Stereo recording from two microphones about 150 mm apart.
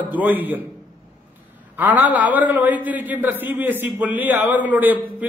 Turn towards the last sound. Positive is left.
turn(degrees=-10)  # may be behind; listen again after turning